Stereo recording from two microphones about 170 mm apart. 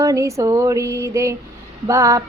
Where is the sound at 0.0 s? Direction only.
20° right (ahead or behind).